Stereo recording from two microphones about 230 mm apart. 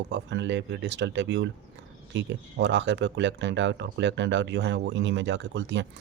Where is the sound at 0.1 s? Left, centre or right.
Right.